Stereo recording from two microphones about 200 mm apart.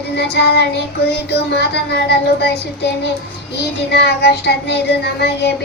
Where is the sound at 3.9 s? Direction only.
55° left (ahead or behind).